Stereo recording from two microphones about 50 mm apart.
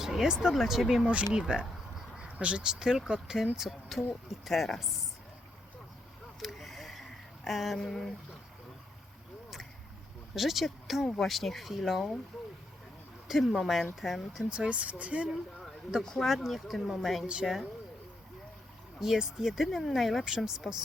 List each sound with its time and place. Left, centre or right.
0.0 s speech: centre
0.5 s speech: centre
1.3 s speech: centre
6.4 s a sound: centre
7.8 s a sound: centre
10.3 s speech: centre
13.2 s speech: centre
14.3 s speech: centre
14.7 s speech: right
16.2 s speech: centre
18.9 s speech: centre